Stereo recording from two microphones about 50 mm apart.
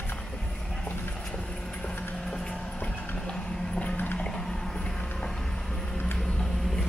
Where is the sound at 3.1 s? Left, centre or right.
Centre.